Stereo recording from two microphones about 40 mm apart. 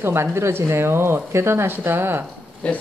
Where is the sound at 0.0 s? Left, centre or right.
Right.